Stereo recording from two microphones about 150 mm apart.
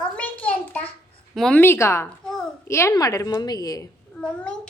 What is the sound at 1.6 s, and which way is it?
Speech, 15° left (ahead or behind).